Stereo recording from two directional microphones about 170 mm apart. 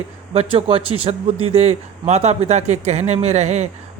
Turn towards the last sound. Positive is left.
turn(degrees=-40)  # may be behind; listen again after turning